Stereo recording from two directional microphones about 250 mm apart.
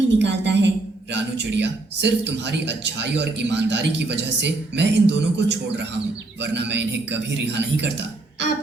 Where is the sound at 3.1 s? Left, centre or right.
Right.